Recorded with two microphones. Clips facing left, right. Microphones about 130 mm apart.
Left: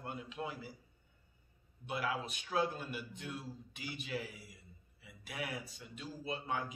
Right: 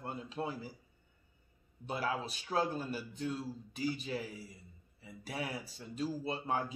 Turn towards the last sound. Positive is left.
turn(degrees=-30)  # may be behind; listen again after turning